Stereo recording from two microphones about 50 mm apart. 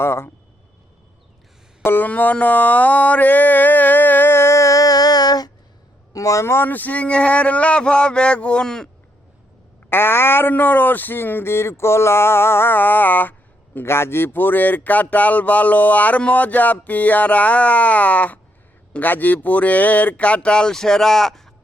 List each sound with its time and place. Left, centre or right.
0.0 s speech: left
1.8 s speech: left
2.0 s a sound: left
6.1 s speech: left
6.7 s speech: left; by 8.9 s centre
9.9 s speech: left
10.5 s speech: left
13.8 s speech: left; by 21.5 s centre